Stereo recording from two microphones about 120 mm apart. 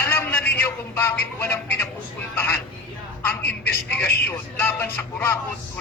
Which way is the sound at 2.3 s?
20° left (ahead or behind).